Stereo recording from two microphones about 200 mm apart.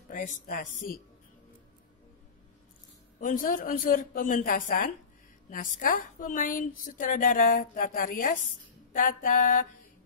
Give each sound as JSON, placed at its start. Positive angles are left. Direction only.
{"t": 0.1, "sound": "a woman's voice", "side_deg": 40}
{"t": 3.2, "sound": "a woman's voice", "side_deg": 40}
{"t": 8.9, "sound": "a sound", "side_deg": 40}